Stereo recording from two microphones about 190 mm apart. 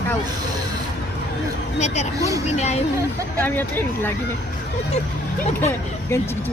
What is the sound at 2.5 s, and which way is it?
Speech, 35° left (ahead or behind).